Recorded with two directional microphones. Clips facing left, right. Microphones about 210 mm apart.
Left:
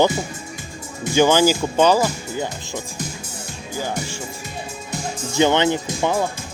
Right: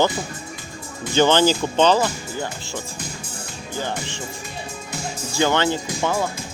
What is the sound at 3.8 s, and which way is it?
Speech, 10° left (ahead or behind).